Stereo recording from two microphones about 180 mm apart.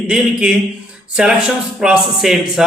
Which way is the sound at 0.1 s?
5° right (ahead or behind).